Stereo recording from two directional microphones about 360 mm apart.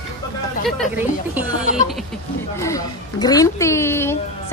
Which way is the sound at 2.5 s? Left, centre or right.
Centre.